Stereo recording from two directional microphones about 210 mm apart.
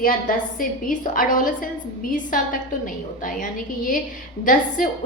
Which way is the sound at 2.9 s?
40° left (ahead or behind).